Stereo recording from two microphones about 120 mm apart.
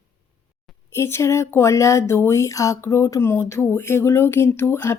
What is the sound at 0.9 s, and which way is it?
Speech, 20° left (ahead or behind).